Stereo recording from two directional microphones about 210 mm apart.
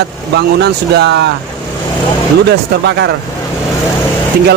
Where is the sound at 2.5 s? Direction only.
55° right (ahead or behind).